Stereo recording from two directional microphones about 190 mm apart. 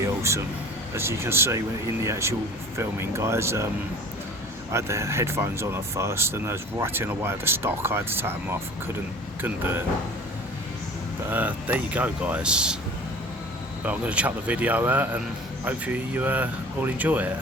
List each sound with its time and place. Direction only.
0.0 s a sound: 15° right (ahead or behind)
0.9 s speech: 15° right (ahead or behind)
4.7 s speech: 15° right (ahead or behind)
9.4 s speech: 10° right (ahead or behind)
11.3 s speech: 10° right (ahead or behind)
13.8 s speech: 5° right (ahead or behind)